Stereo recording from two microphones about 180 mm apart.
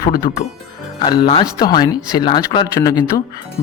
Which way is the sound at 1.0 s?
25° left (ahead or behind).